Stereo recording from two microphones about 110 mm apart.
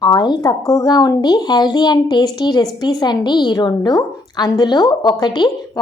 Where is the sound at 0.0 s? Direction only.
35° left (ahead or behind).